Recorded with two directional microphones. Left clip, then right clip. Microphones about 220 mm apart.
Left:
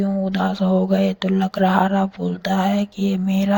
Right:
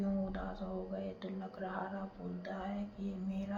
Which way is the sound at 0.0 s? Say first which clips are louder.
Left 18 dB; 45° left (ahead or behind).